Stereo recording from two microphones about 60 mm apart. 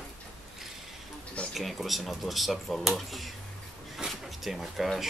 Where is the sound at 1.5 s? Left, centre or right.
Centre.